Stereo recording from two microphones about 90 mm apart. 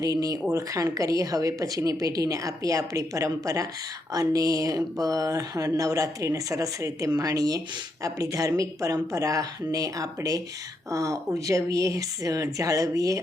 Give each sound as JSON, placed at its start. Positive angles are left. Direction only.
{"t": 0.0, "sound": "speech", "side_deg": -45}